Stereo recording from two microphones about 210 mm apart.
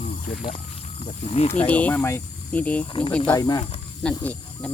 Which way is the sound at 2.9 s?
25° left (ahead or behind).